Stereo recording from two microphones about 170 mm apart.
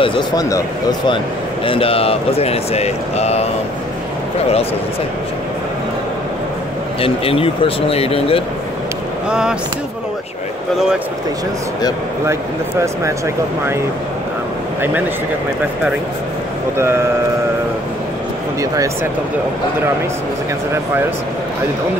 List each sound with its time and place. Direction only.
0.0 s speech: 30° left (ahead or behind)
1.7 s speech: 35° left (ahead or behind)
7.0 s speech: 35° left (ahead or behind)
9.3 s speech: 5° right (ahead or behind)